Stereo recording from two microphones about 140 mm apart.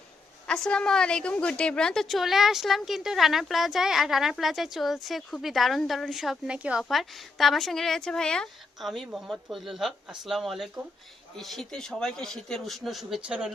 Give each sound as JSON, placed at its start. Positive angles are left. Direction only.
{"t": 0.4, "sound": "a woman's voice", "side_deg": 5}